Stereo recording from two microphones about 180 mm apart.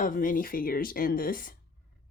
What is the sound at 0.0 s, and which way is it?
Speech, 50° left (ahead or behind).